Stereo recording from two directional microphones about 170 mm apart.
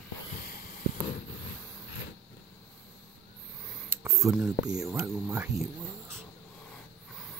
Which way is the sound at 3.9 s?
15° right (ahead or behind).